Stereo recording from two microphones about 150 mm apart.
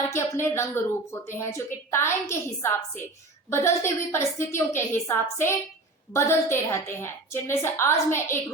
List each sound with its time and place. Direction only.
0.1 s speech: 15° left (ahead or behind)